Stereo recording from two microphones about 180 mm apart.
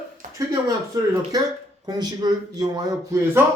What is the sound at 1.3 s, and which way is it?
Speech, 20° right (ahead or behind).